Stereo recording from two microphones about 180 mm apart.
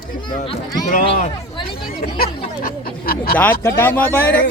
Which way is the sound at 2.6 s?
55° left (ahead or behind).